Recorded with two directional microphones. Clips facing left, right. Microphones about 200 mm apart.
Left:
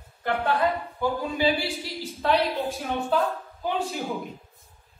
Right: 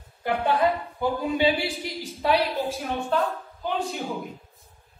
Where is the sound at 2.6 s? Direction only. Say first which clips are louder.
Even; centre (ahead or behind).